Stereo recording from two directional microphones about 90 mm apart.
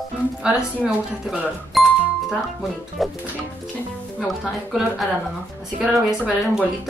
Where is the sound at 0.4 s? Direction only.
10° right (ahead or behind).